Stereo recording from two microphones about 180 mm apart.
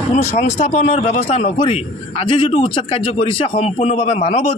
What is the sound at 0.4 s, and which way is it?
A man's voice, 40° left (ahead or behind).